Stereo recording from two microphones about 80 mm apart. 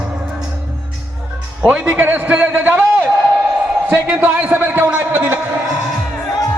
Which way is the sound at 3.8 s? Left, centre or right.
Centre.